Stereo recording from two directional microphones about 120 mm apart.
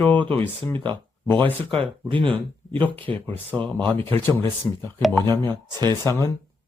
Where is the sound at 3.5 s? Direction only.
10° left (ahead or behind).